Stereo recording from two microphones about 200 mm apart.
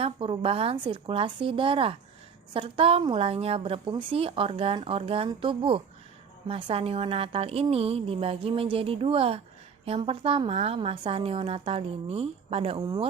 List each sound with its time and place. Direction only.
0.0 s speech: 25° right (ahead or behind)